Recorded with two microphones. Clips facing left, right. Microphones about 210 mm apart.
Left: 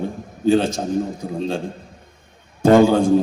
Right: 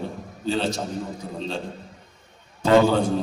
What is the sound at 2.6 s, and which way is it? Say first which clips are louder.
Speech: left 5 dB; 45° left (ahead or behind).